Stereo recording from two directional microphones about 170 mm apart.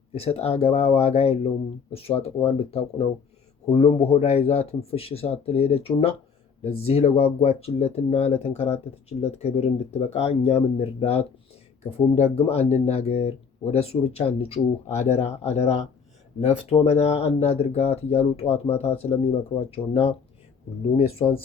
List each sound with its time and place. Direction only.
0.1 s speech: 35° left (ahead or behind)
3.7 s speech: 35° left (ahead or behind)